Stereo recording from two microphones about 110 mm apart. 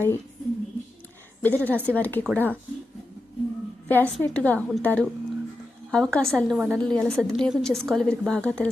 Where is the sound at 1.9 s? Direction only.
15° left (ahead or behind).